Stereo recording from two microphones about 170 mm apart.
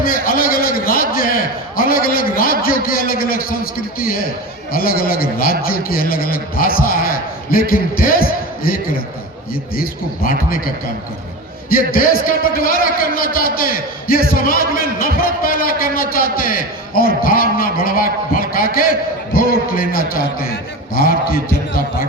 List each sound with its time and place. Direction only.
0.0 s a man's voice: 60° left (ahead or behind)
11.9 s a man's voice: 60° left (ahead or behind)